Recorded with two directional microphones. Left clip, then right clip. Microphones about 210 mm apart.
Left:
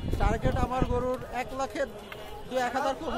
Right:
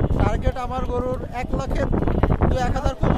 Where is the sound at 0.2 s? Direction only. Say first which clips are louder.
Right 1 dB; 40° right (ahead or behind).